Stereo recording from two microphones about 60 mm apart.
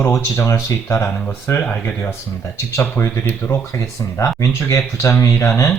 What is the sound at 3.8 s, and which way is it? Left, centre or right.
Speech, left.